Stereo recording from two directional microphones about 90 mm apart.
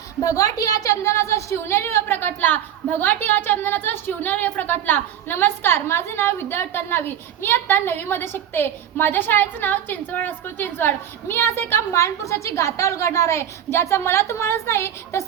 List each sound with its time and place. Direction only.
0.2 s a woman's voice: 40° left (ahead or behind)